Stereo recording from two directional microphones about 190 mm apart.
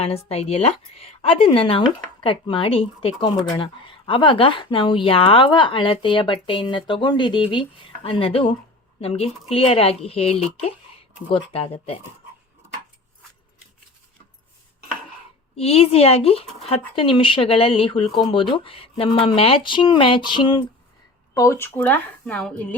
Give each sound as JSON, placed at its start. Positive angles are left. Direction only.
{"t": 0.3, "sound": "speech", "side_deg": 35}
{"t": 15.5, "sound": "speech", "side_deg": 30}